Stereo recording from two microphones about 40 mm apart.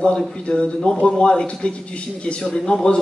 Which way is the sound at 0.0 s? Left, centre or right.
Left.